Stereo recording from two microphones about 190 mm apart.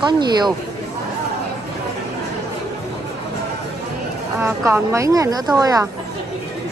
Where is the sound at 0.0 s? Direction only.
20° right (ahead or behind).